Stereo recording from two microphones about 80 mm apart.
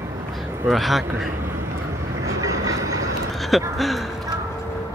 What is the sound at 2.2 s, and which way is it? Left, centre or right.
Vehicle, right.